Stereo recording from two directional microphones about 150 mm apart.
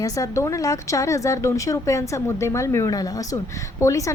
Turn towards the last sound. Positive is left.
turn(degrees=20)  # may be behind; listen again after turning